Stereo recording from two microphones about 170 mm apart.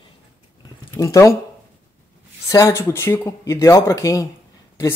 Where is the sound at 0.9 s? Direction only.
20° left (ahead or behind).